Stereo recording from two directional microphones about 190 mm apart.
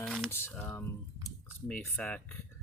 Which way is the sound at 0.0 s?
5° left (ahead or behind).